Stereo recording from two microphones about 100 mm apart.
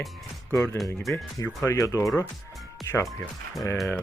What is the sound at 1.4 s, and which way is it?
Speech, 35° left (ahead or behind).